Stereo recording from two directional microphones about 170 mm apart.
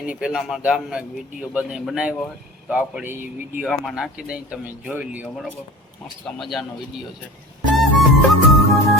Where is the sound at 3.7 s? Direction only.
Centre (ahead or behind).